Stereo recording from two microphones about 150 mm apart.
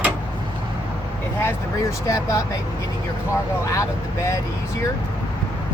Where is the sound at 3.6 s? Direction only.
20° left (ahead or behind).